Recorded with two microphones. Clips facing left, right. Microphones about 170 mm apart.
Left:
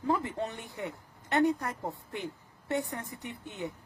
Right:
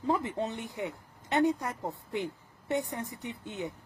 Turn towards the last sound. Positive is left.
turn(degrees=-20)  # may be behind; listen again after turning